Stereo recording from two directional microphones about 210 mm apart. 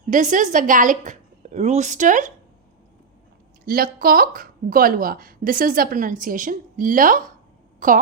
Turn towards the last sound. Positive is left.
turn(degrees=-40)  # may be behind; listen again after turning